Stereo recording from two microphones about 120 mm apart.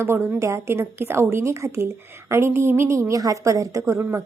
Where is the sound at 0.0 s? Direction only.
20° right (ahead or behind).